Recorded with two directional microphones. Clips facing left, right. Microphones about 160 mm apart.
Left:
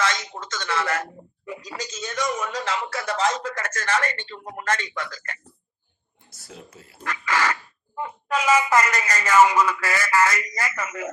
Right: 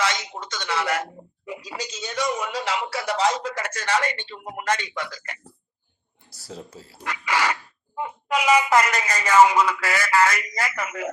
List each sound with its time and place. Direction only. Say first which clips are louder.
0.0 s a sound: even; 15° right (ahead or behind)
1.5 s speech: right 1 dB; 15° right (ahead or behind)
6.5 s speech: right 5 dB; 30° right (ahead or behind)
7.0 s speech: even; 15° right (ahead or behind)